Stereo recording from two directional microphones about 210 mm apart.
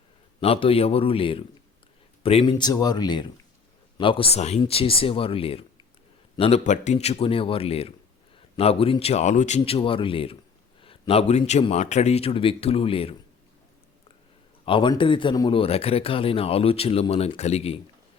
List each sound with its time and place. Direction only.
0.3 s speech: 25° left (ahead or behind)
14.6 s speech: 25° left (ahead or behind)